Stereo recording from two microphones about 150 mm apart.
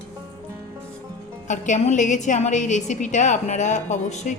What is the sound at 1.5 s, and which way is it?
A woman's voice, 50° left (ahead or behind).